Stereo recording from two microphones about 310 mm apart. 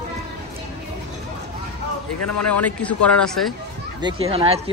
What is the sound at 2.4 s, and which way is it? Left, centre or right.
Speech, centre.